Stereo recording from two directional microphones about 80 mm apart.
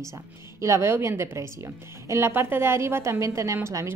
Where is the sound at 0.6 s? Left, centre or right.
Right.